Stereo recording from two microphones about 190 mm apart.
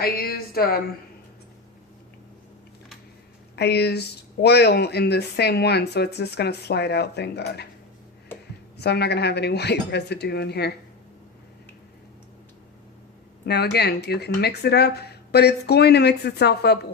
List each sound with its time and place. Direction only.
0.0 s speech: 55° left (ahead or behind)
3.5 s speech: 60° left (ahead or behind)
8.8 s speech: 60° left (ahead or behind)
13.4 s speech: 60° left (ahead or behind)